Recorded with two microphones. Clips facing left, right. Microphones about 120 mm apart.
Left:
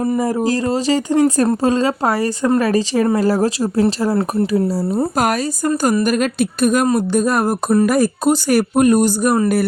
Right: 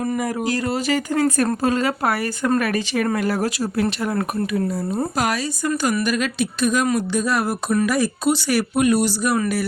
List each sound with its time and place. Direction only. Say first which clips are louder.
0.0 s speech: left 5 dB; 30° left (ahead or behind)
5.1 s speech: left 5 dB; 45° left (ahead or behind)